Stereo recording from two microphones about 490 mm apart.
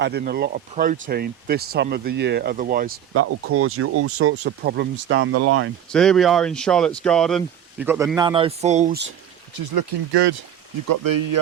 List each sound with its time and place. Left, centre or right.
0.0 s speech: centre
5.9 s speech: centre
9.6 s speech: right
10.8 s speech: right